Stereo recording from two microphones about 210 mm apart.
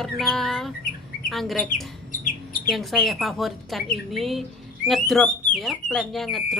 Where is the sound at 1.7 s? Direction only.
40° left (ahead or behind).